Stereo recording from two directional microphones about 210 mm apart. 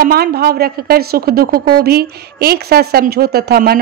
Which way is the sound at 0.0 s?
45° right (ahead or behind).